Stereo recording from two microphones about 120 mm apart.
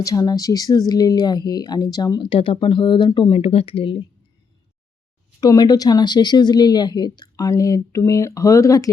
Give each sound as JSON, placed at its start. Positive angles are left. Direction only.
{"t": 0.0, "sound": "speech", "side_deg": 30}
{"t": 5.4, "sound": "speech", "side_deg": 35}